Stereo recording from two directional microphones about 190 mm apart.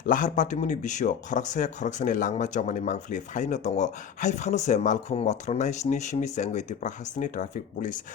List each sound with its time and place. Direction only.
0.0 s speech: 45° left (ahead or behind)